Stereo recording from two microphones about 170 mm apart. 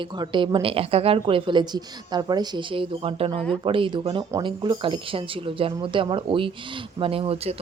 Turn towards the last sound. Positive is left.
turn(degrees=-35)  # may be behind; listen again after turning